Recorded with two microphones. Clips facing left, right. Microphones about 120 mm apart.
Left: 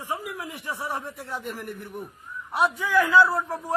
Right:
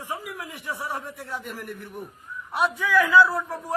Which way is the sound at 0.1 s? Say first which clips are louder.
Left 3 dB; 15° left (ahead or behind).